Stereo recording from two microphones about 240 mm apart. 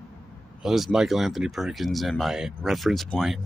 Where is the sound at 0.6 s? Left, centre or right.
Centre.